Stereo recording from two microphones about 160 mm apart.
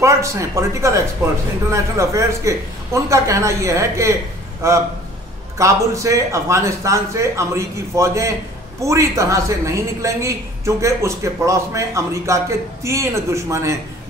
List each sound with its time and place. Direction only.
0.0 s a woman's voice: 20° right (ahead or behind)